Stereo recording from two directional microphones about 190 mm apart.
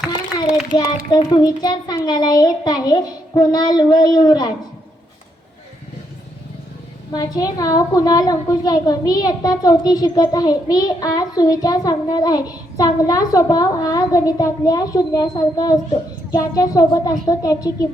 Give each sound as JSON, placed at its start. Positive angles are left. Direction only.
{"t": 1.1, "sound": "a woman's voice", "side_deg": 25}
{"t": 7.1, "sound": "a woman's voice", "side_deg": 20}